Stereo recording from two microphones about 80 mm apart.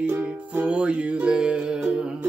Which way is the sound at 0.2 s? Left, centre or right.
Centre.